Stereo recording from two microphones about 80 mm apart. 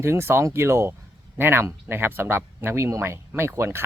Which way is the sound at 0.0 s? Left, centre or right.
Right.